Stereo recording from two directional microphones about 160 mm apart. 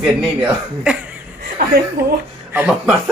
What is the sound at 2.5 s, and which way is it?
Speech, 10° right (ahead or behind).